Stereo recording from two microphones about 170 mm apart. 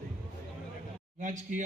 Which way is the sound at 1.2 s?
45° right (ahead or behind).